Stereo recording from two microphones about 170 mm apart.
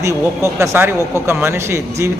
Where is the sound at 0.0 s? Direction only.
15° right (ahead or behind).